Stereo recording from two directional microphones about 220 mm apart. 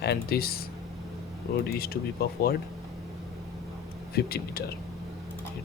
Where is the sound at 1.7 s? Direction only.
45° left (ahead or behind).